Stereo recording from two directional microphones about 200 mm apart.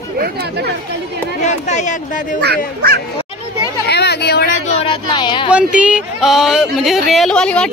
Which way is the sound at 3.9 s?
55° left (ahead or behind).